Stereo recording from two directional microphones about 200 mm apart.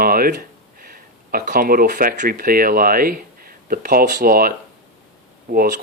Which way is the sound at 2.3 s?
45° right (ahead or behind).